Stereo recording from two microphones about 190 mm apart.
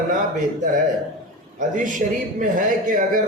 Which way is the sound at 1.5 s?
40° right (ahead or behind).